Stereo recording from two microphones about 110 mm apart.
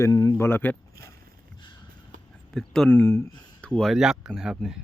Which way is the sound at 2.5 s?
5° left (ahead or behind).